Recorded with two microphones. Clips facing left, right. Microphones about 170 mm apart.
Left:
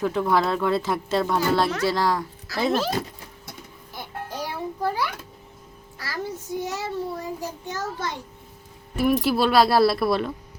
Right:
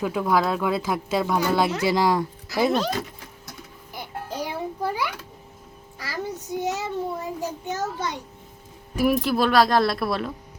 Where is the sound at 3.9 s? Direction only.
15° right (ahead or behind).